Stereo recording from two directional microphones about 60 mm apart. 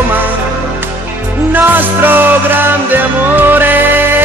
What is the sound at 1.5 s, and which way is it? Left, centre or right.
Music, right.